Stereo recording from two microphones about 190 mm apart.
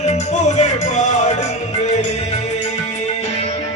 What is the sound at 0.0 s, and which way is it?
Music, 35° left (ahead or behind).